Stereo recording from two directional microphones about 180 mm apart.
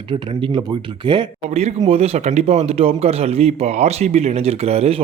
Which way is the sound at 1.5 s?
35° right (ahead or behind).